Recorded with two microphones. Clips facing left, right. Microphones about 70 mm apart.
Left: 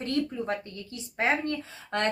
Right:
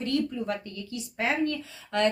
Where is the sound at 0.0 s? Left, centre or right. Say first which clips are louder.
Right 1 dB; left.